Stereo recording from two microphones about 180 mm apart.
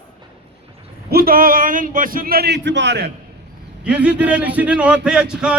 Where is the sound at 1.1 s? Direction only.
55° right (ahead or behind); by 3.1 s 70° right (ahead or behind).